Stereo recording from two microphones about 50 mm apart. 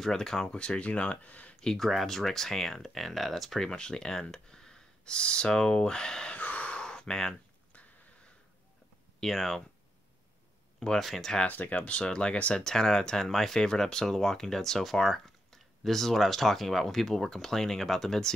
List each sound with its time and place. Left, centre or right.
0.0 s speech: centre
0.6 s speech: left
1.6 s speech: centre
6.3 s a sound: left
6.7 s a sound: centre
9.2 s speech: centre
11.0 s speech: centre
11.4 s speech: left
12.0 s speech: centre
12.5 s speech: centre